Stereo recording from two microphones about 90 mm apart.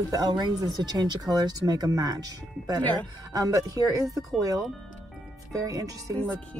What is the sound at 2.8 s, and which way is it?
Speech, 15° left (ahead or behind).